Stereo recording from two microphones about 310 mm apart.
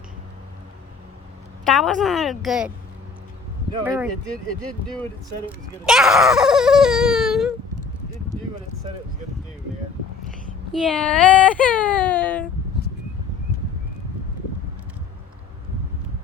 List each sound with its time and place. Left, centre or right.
1.6 s speech: centre
3.8 s speech: centre
5.8 s speech: centre
10.7 s speech: centre